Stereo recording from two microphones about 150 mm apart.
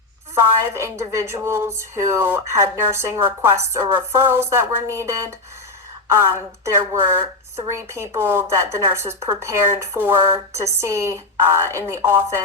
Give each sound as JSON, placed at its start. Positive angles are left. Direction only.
{"t": 0.3, "sound": "a woman's voice", "side_deg": -15}